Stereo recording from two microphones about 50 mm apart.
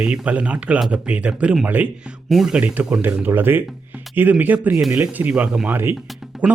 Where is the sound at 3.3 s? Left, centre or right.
Right.